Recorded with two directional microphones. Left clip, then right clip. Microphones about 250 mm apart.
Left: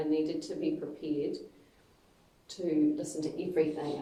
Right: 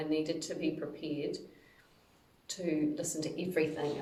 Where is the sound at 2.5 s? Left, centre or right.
Right.